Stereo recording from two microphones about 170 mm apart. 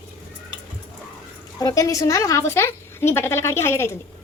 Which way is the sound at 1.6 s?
20° left (ahead or behind).